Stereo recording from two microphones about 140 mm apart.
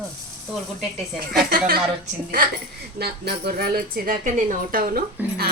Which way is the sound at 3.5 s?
90° right.